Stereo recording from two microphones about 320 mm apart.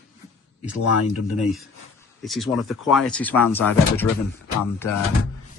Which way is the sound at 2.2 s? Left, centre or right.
Centre.